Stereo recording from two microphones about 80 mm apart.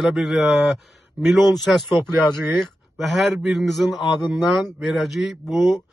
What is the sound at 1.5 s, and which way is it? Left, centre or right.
A man's voice, centre.